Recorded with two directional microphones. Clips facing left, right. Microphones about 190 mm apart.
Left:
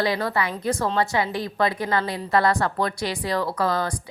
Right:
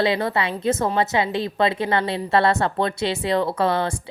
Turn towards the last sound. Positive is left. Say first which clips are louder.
# right 3 dB
turn(degrees=-25)  # may be behind; listen again after turning